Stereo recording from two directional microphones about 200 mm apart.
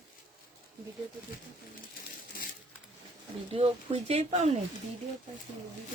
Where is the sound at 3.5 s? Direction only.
30° right (ahead or behind).